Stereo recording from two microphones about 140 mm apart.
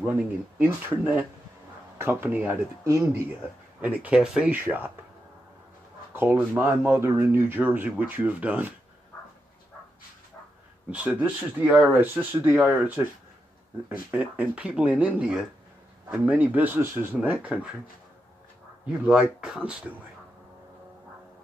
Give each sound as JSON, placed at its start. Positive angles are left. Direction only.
{"t": 0.6, "sound": "speech", "side_deg": -15}
{"t": 6.1, "sound": "speech", "side_deg": -15}
{"t": 10.9, "sound": "speech", "side_deg": -10}
{"t": 19.0, "sound": "speech", "side_deg": -5}